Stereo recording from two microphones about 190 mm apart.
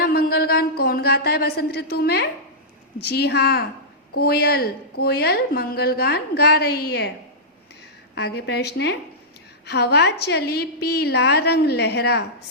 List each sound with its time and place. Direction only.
0.0 s a woman's voice: 55° left (ahead or behind)
8.1 s a woman's voice: 60° left (ahead or behind)